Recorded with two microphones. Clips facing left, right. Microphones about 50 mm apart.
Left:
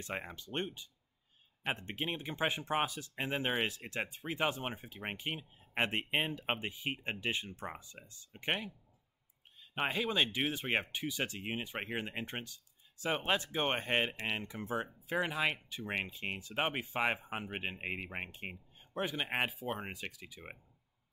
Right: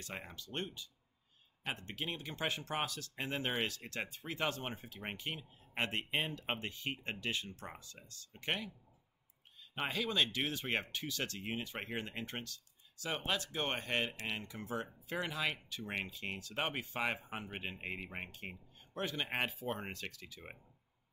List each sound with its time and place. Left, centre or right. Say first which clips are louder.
0.0 s speech: left 5 dB; left